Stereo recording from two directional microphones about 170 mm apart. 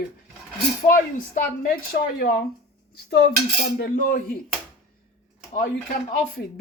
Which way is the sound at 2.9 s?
70° left (ahead or behind).